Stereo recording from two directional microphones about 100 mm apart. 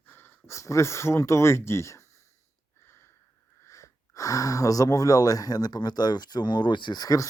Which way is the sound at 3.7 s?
30° left (ahead or behind).